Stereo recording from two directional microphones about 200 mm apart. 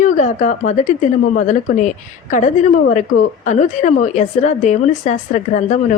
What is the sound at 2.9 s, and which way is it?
Speech, 40° left (ahead or behind).